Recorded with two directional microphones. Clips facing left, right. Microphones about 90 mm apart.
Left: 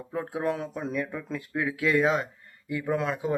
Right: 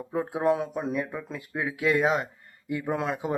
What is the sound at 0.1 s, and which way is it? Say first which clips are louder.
Speech: right 4 dB; 20° right (ahead or behind).